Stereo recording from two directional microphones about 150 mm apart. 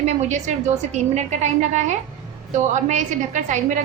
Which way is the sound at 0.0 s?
50° right (ahead or behind).